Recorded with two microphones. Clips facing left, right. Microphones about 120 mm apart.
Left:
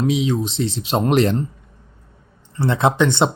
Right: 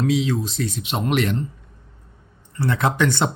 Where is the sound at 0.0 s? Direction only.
20° left (ahead or behind); by 1.5 s 35° left (ahead or behind).